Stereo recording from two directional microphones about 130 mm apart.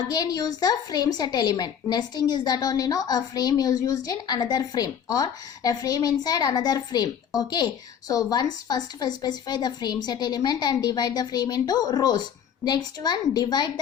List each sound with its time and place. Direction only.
0.1 s a woman's voice: 30° left (ahead or behind)